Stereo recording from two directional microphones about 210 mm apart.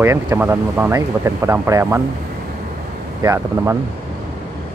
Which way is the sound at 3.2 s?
15° right (ahead or behind).